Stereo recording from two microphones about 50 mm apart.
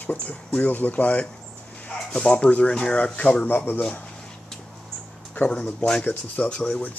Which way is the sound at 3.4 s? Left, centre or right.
Left.